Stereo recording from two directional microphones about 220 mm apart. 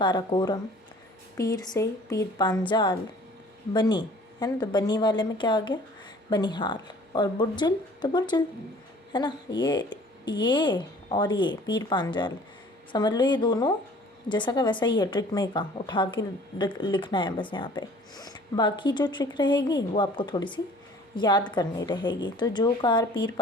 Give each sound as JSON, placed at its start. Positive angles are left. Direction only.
{"t": 0.0, "sound": "a woman's voice", "side_deg": 20}